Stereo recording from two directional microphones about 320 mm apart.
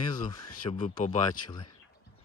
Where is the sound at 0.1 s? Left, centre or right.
Centre.